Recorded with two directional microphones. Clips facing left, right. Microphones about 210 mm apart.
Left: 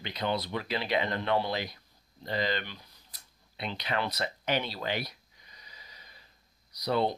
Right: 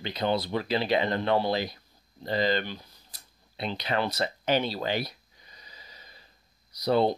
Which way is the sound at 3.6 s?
30° right (ahead or behind).